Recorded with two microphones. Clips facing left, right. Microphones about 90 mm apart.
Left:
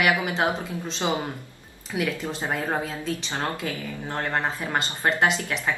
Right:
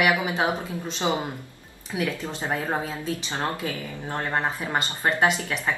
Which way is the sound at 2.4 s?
15° left (ahead or behind).